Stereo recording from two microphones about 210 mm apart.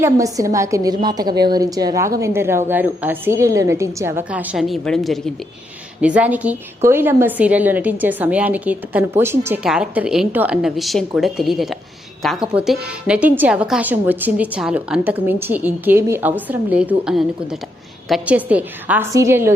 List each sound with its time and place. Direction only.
0.0 s a woman's voice: 15° right (ahead or behind)